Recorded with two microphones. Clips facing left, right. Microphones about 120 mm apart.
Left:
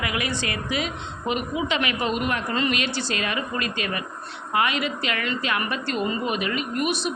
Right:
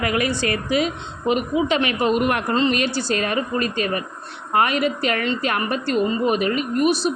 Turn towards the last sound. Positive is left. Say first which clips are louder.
# right 6 dB
turn(degrees=-40)  # may be behind; listen again after turning